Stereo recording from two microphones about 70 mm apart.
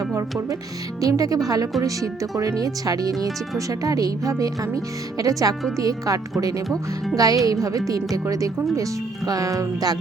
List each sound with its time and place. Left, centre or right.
1.0 s speech: right